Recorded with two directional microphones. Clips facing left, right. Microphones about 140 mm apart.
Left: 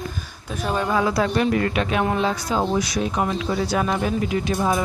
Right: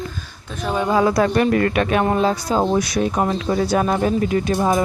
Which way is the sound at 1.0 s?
50° right (ahead or behind).